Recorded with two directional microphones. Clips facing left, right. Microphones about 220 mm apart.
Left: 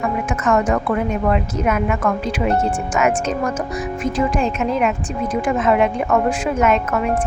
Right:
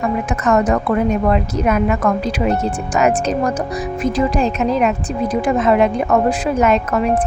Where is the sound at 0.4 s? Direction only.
40° right (ahead or behind).